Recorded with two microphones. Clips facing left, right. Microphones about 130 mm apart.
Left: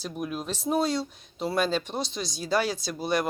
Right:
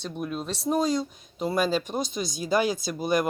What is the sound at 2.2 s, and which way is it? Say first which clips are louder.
Speech: right 2 dB; 50° right (ahead or behind).